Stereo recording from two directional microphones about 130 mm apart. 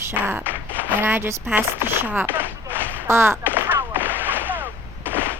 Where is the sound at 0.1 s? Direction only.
15° right (ahead or behind).